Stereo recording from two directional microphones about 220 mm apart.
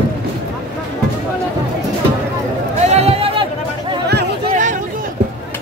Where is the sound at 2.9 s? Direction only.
25° right (ahead or behind).